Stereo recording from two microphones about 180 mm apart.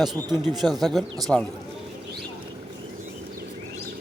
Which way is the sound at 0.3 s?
Centre (ahead or behind).